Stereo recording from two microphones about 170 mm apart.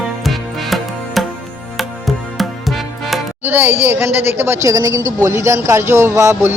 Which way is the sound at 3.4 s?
10° right (ahead or behind).